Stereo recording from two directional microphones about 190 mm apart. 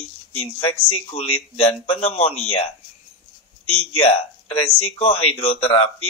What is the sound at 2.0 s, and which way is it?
Speech, 30° left (ahead or behind).